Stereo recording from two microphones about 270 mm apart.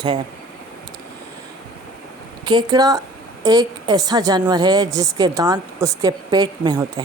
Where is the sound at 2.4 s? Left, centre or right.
Centre.